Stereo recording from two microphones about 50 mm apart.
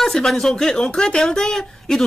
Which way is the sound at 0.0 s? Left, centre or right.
Centre.